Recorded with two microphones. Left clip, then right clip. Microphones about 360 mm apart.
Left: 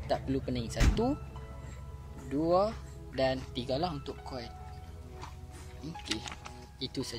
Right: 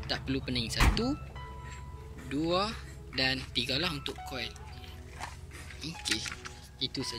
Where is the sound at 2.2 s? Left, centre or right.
Centre.